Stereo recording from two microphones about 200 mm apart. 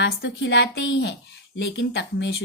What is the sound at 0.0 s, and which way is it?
A woman's voice, 60° left (ahead or behind).